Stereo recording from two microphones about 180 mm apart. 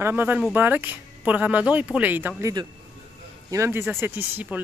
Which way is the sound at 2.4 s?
25° right (ahead or behind).